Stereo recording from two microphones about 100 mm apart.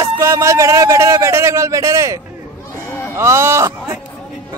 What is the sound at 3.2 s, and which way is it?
Speech, 25° right (ahead or behind).